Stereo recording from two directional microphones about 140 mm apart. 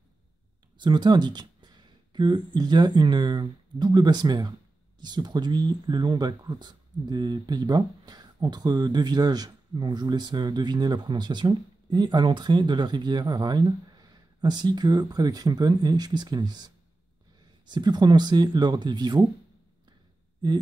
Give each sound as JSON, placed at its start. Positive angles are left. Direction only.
{"t": 0.7, "sound": "speech", "side_deg": -35}